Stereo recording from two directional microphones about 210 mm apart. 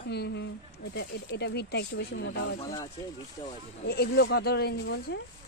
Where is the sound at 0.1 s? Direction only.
55° left (ahead or behind).